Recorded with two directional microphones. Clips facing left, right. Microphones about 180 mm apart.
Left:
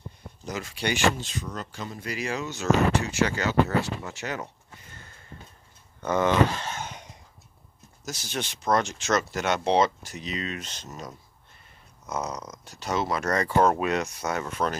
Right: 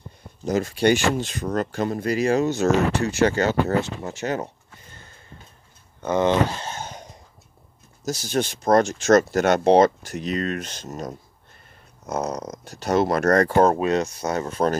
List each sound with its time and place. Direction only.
0.5 s speech: 45° right (ahead or behind)
6.0 s a sound: 25° right (ahead or behind)
8.0 s speech: 40° right (ahead or behind)
13.7 s speech: 30° right (ahead or behind)